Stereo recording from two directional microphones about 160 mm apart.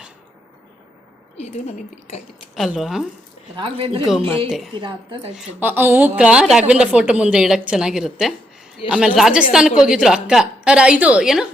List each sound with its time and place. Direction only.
1.4 s speech: 45° left (ahead or behind)
2.6 s a woman's voice: centre (ahead or behind)
3.5 s a woman's voice: 35° right (ahead or behind)
4.4 s a woman's voice: centre (ahead or behind)
4.7 s a woman's voice: 30° right (ahead or behind)
5.3 s a woman's voice: 5° right (ahead or behind)